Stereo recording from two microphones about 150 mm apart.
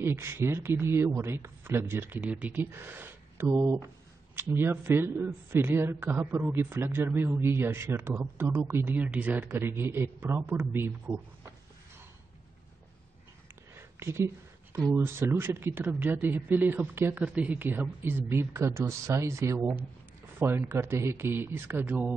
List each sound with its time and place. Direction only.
0.0 s a man's voice: 15° right (ahead or behind)
13.9 s a man's voice: 15° right (ahead or behind)